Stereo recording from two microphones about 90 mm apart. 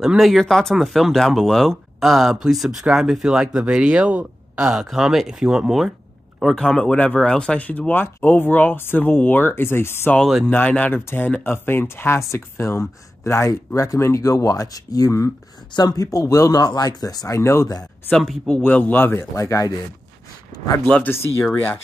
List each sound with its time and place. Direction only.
0.0 s speech: centre (ahead or behind)
6.5 s speech: 10° left (ahead or behind); by 10.1 s 25° left (ahead or behind)
10.5 s speech: 15° left (ahead or behind); by 15.3 s 35° left (ahead or behind)
15.7 s speech: 45° left (ahead or behind)
17.4 s speech: 30° left (ahead or behind)
18.1 s speech: centre (ahead or behind)
18.5 s speech: 15° left (ahead or behind)
19.3 s speech: 40° left (ahead or behind)
20.8 s speech: 15° left (ahead or behind)